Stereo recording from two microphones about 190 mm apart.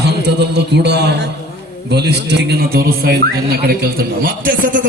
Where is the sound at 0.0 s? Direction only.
60° right (ahead or behind).